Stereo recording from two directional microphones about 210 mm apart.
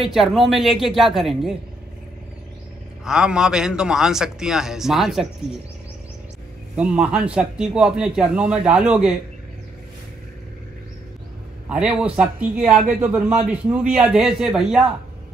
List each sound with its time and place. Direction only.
0.0 s speech: centre (ahead or behind)
3.1 s speech: 5° right (ahead or behind)
6.8 s speech: 5° right (ahead or behind)
11.7 s speech: 5° right (ahead or behind)